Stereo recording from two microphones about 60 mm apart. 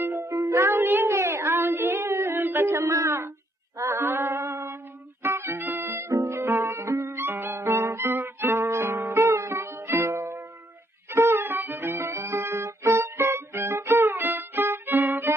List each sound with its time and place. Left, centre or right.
0.0 s music: right
0.3 s music: right
2.6 s speech: right
3.8 s female singing: right
5.2 s music: right
6.1 s music: right